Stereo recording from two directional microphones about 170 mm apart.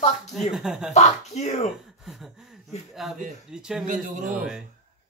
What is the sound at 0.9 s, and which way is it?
Speech, 40° left (ahead or behind).